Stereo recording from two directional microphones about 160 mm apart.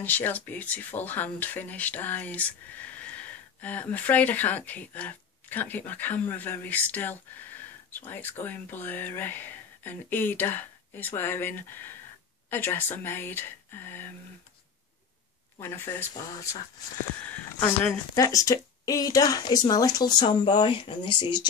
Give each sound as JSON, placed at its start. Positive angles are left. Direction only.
{"t": 0.0, "sound": "speech", "side_deg": 10}
{"t": 15.6, "sound": "speech", "side_deg": 15}
{"t": 17.2, "sound": "speech", "side_deg": 10}